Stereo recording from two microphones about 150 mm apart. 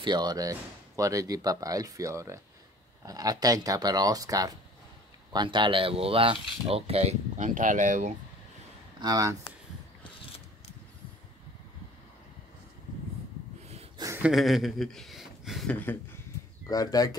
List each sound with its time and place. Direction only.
0.0 s speech: 30° right (ahead or behind); by 8.1 s 55° right (ahead or behind)
9.0 s speech: 25° right (ahead or behind)
13.9 s a sound: 20° right (ahead or behind)
14.2 s speech: centre (ahead or behind)
16.6 s speech: 25° left (ahead or behind)